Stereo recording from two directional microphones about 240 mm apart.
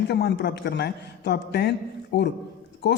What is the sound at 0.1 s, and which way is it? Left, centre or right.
Speech, left.